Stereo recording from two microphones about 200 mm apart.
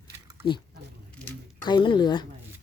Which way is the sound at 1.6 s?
25° left (ahead or behind).